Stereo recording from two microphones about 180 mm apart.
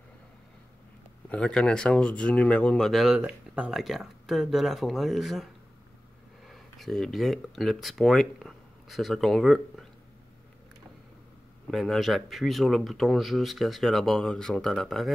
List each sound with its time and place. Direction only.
1.3 s speech: 5° left (ahead or behind)
11.7 s speech: centre (ahead or behind)